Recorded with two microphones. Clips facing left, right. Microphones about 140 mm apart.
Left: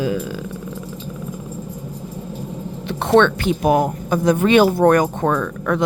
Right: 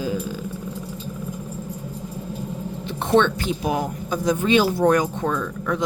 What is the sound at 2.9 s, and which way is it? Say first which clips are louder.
Speech: left 4 dB; 75° left (ahead or behind).